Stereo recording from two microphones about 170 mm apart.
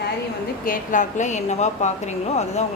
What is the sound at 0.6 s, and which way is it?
A woman's voice, 55° left (ahead or behind).